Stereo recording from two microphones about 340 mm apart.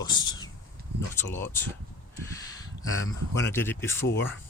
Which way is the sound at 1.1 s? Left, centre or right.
Centre.